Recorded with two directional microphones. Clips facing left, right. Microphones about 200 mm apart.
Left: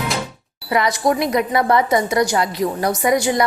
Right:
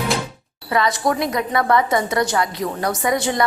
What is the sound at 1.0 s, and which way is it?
A woman's voice, 20° left (ahead or behind).